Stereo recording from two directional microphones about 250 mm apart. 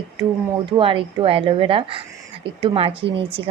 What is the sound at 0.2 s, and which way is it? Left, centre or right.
Speech, centre.